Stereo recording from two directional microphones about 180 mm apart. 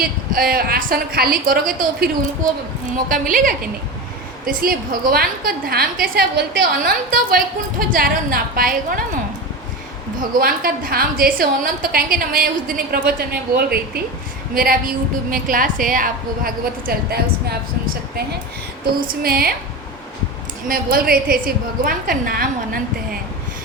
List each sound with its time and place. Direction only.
0.0 s a woman's voice: 55° right (ahead or behind)
10.4 s a woman's voice: 55° right (ahead or behind)
18.9 s a woman's voice: 55° right (ahead or behind)
20.7 s a woman's voice: 55° right (ahead or behind)